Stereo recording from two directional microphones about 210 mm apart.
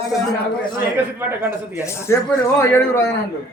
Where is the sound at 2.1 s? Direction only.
10° left (ahead or behind).